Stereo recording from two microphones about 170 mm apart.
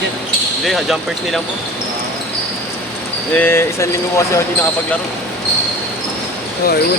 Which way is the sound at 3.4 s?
15° left (ahead or behind).